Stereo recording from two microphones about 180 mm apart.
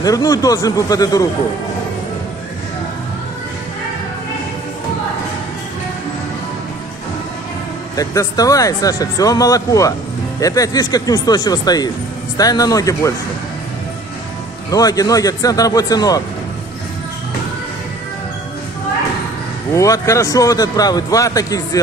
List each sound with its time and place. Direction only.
0.0 s speech: 20° left (ahead or behind)
7.9 s speech: 20° left (ahead or behind)
14.7 s speech: 20° left (ahead or behind)
19.7 s speech: 15° left (ahead or behind)